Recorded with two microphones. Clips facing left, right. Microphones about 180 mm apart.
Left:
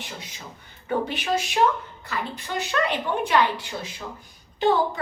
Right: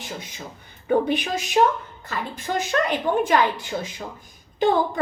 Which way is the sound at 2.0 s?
45° right (ahead or behind).